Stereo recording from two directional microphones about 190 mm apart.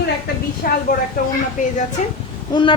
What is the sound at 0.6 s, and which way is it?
A woman's voice, 50° left (ahead or behind).